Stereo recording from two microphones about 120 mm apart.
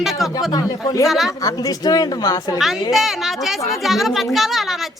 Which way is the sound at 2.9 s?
Centre (ahead or behind).